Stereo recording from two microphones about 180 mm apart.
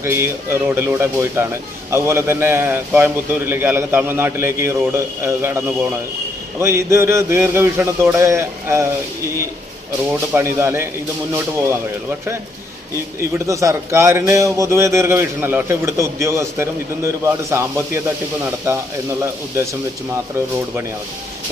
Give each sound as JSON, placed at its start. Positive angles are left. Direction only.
{"t": 0.0, "sound": "a man's voice", "side_deg": -15}
{"t": 10.1, "sound": "a man's voice", "side_deg": -15}
{"t": 13.3, "sound": "a man's voice", "side_deg": -15}